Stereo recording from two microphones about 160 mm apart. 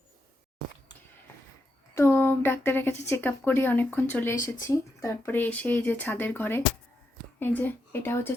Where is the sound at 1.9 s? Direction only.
15° left (ahead or behind).